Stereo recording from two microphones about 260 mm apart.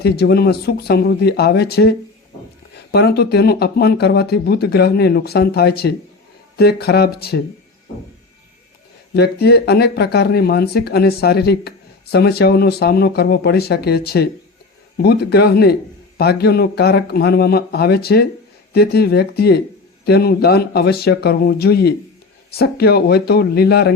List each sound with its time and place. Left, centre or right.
0.0 s speech: left
9.1 s speech: left